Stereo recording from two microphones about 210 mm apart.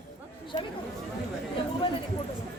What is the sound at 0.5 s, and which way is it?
Chatter, 25° left (ahead or behind).